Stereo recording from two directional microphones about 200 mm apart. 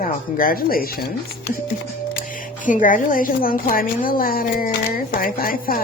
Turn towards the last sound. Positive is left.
turn(degrees=45)  # may be behind; listen again after turning